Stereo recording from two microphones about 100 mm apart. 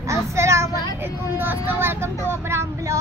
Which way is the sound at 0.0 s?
30° right (ahead or behind).